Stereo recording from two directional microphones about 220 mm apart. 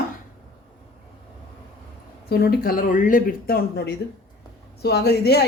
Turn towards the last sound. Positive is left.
turn(degrees=45)  # may be behind; listen again after turning